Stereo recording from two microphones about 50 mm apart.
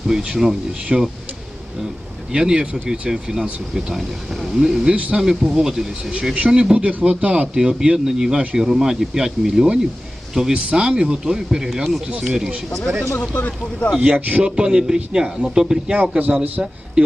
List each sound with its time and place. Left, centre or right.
0.2 s speech: centre
2.3 s speech: centre
13.1 s speech: left
14.0 s speech: right
14.4 s speech: centre
16.0 s speech: right